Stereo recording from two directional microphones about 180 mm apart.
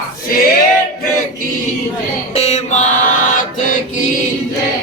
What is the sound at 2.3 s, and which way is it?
Chant, 35° left (ahead or behind).